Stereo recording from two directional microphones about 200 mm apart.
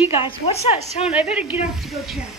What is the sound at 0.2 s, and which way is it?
Speech, 30° left (ahead or behind).